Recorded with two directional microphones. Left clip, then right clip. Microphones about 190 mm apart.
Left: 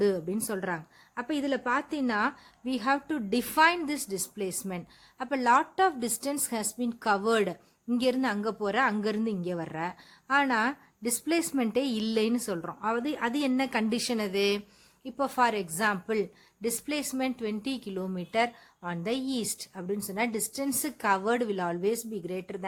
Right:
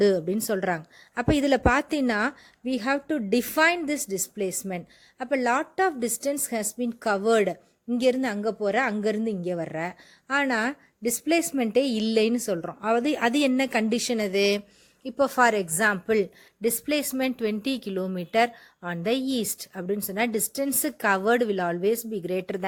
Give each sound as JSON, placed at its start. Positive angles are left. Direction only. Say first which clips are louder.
{"t": 0.0, "sound": "a woman's voice", "louder": "right 6 dB", "side_deg": -20}